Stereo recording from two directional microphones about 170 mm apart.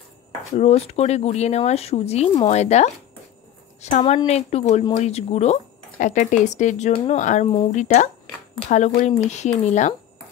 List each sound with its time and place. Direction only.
0.6 s speech: 35° left (ahead or behind)